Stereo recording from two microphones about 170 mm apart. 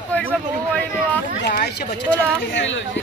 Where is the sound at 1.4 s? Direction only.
80° left.